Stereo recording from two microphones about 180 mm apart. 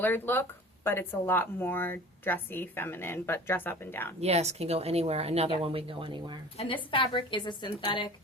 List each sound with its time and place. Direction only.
0.0 s speech: 10° left (ahead or behind)
4.2 s speech: 35° right (ahead or behind)
6.9 s a woman's voice: 30° left (ahead or behind)